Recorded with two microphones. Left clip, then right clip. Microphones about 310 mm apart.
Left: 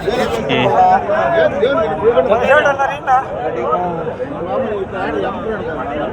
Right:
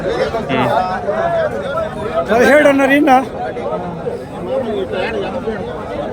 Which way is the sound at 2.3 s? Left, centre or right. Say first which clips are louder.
Right 2 dB; right.